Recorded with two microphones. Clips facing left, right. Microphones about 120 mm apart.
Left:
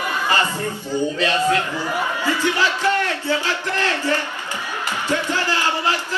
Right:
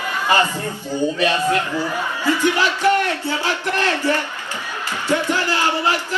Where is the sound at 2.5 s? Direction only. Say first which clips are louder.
Right 2 dB; 15° right (ahead or behind).